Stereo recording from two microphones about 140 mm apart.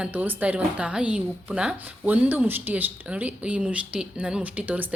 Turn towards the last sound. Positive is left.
turn(degrees=-10)  # may be behind; listen again after turning